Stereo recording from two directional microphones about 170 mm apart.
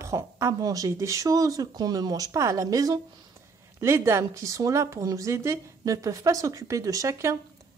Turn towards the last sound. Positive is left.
turn(degrees=-20)  # may be behind; listen again after turning